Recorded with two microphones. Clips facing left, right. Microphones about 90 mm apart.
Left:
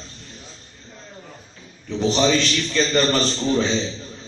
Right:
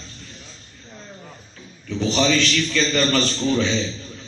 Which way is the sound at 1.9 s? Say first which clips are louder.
Left 1 dB; 25° left (ahead or behind).